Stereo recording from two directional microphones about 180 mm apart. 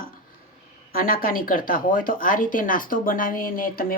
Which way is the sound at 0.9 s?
55° left (ahead or behind).